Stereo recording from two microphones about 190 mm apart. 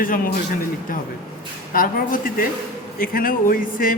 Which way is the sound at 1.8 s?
45° left (ahead or behind).